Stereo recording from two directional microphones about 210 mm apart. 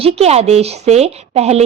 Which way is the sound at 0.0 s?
30° right (ahead or behind).